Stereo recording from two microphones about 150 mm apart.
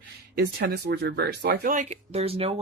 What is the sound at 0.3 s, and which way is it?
Speech, 90° right.